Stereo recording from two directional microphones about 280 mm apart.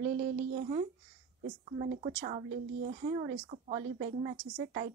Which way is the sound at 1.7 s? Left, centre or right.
Right.